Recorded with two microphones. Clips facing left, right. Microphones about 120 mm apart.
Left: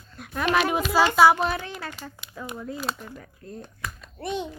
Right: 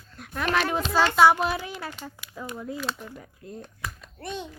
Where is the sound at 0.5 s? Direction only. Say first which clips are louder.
Left 2 dB; 10° left (ahead or behind).